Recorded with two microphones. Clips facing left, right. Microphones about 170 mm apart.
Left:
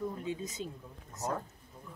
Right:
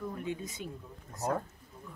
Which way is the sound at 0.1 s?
25° left (ahead or behind).